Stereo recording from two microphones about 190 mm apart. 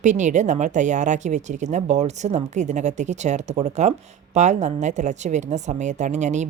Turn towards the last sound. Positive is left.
turn(degrees=-40)  # may be behind; listen again after turning